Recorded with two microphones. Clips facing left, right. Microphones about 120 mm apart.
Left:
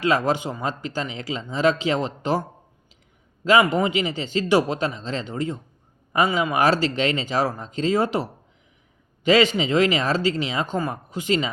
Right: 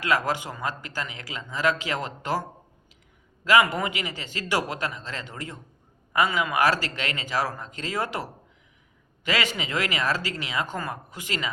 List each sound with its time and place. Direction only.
0.0 s a man's voice: 25° left (ahead or behind)
3.4 s a man's voice: 25° left (ahead or behind)